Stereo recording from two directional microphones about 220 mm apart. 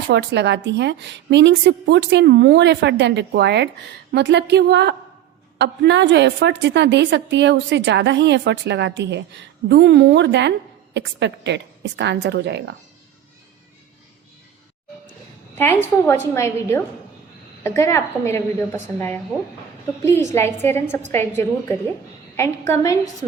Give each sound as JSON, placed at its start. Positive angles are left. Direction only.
{"t": 0.1, "sound": "a woman's voice", "side_deg": -50}
{"t": 15.5, "sound": "a woman's voice", "side_deg": 10}